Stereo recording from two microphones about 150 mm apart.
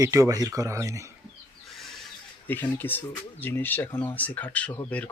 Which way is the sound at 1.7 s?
Centre (ahead or behind).